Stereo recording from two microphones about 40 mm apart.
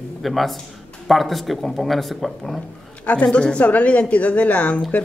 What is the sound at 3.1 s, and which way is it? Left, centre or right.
A woman's voice, left.